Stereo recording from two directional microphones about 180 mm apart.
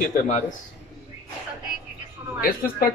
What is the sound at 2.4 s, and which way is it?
Speech, 55° left (ahead or behind).